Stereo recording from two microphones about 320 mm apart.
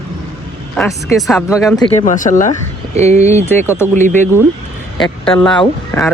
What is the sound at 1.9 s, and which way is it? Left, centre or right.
Speech, left.